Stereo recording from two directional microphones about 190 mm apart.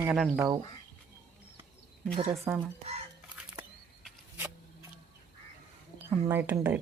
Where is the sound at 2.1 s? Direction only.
30° right (ahead or behind).